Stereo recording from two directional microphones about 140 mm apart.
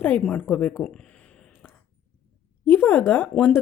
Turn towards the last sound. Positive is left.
turn(degrees=10)  # may be behind; listen again after turning